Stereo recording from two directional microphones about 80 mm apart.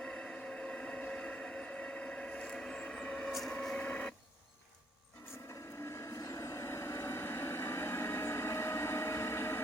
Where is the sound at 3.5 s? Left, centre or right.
Centre.